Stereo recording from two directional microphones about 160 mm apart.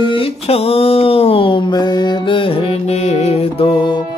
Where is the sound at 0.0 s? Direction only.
35° left (ahead or behind).